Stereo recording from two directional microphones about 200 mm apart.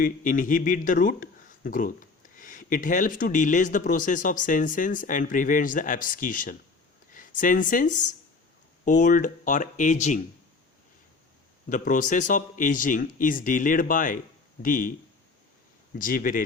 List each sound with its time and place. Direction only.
0.0 s speech: 40° left (ahead or behind)
11.7 s speech: 40° left (ahead or behind)
16.0 s speech: 40° left (ahead or behind)